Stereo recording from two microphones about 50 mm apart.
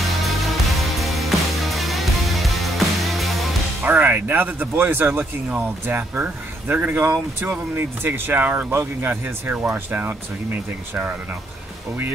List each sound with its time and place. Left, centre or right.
0.2 s music: centre
3.8 s speech: right